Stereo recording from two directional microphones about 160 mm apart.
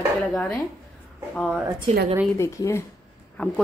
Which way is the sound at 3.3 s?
5° left (ahead or behind).